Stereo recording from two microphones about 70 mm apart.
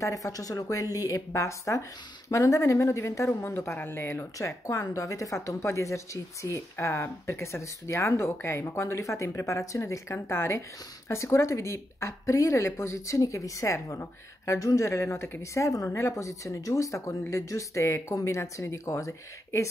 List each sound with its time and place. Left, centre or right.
0.0 s speech: left
15.4 s speech: left